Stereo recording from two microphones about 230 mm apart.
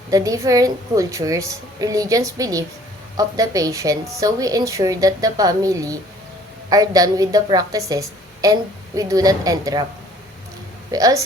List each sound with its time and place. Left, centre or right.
0.1 s a woman's voice: centre
10.9 s a woman's voice: centre